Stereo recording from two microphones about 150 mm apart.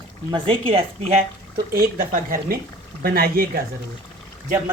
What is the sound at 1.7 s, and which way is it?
Speech, 65° right (ahead or behind).